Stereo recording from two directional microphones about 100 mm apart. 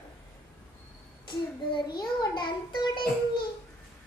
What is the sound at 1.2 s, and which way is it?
A child's voice, 50° left (ahead or behind).